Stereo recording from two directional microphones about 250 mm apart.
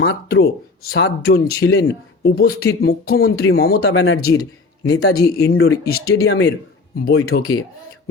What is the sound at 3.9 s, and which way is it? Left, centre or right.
Speech, left.